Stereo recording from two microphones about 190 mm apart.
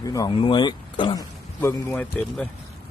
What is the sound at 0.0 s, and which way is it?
Speech, 20° left (ahead or behind).